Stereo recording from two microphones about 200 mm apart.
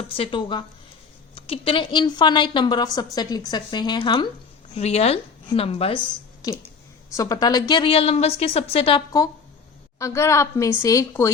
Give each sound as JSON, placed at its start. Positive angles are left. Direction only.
{"t": 0.1, "sound": "a woman's voice", "side_deg": 25}
{"t": 7.1, "sound": "a woman's voice", "side_deg": 15}